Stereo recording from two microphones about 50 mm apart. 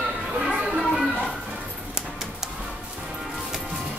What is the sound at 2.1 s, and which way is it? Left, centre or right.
Music, centre.